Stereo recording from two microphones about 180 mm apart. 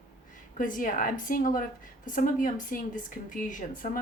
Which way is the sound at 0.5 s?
45° left (ahead or behind).